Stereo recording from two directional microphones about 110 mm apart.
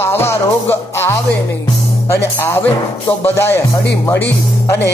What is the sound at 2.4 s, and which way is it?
Music, 25° left (ahead or behind).